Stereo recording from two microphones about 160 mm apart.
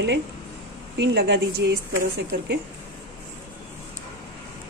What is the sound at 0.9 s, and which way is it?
Speech, 90° right.